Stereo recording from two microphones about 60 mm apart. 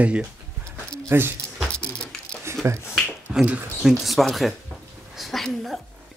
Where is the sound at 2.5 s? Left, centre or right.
Right.